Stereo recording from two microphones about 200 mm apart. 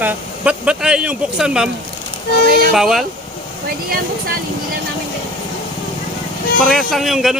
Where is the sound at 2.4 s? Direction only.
45° right (ahead or behind).